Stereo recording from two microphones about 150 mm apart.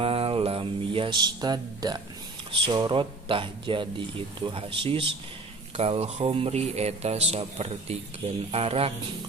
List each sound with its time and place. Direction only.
0.0 s mantra: 40° right (ahead or behind)
2.5 s speech: 30° right (ahead or behind)